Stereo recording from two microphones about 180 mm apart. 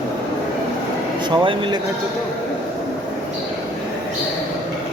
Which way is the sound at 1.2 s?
25° right (ahead or behind).